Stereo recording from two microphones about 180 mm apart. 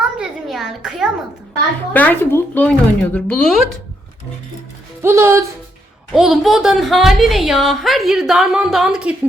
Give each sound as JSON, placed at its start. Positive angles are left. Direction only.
{"t": 0.0, "sound": "a sound", "side_deg": -5}
{"t": 1.9, "sound": "speech", "side_deg": 10}
{"t": 5.0, "sound": "speech", "side_deg": -15}
{"t": 6.1, "sound": "a woman's voice", "side_deg": 0}